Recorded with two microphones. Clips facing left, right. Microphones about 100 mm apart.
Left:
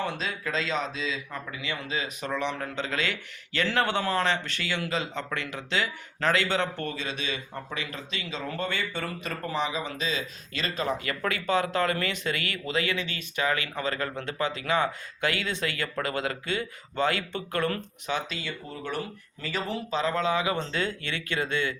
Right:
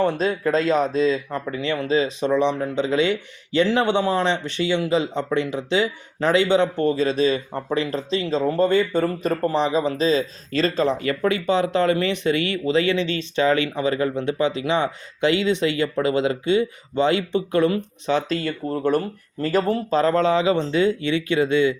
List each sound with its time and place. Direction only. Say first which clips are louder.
0.0 s speech: right 11 dB; 45° right (ahead or behind); by 17.7 s 20° right (ahead or behind)
18.0 s speech: right 10 dB; 30° right (ahead or behind)
18.3 s speech: right 11 dB; 45° right (ahead or behind); by 21.8 s 20° right (ahead or behind)